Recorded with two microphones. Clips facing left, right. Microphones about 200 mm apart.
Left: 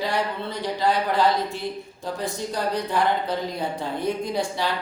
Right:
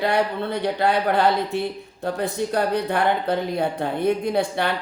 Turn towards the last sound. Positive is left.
turn(degrees=-60)  # may be behind; listen again after turning